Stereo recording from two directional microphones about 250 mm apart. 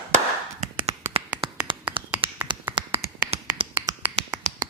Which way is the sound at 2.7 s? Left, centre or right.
Right.